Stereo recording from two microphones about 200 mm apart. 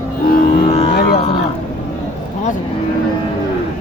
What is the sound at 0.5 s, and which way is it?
Music, 30° left (ahead or behind).